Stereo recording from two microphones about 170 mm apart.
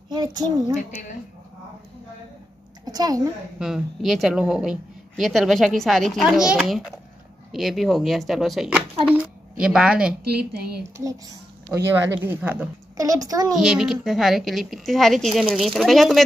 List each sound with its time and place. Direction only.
0.1 s speech: 25° right (ahead or behind)
2.8 s a sound: 25° right (ahead or behind)
3.5 s a woman's voice: 5° right (ahead or behind)
11.7 s speech: 5° right (ahead or behind)
12.9 s a child's voice: 20° right (ahead or behind)
13.6 s speech: 5° right (ahead or behind)